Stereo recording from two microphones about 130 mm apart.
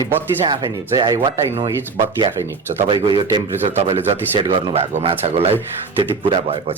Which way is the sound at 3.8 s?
50° right (ahead or behind).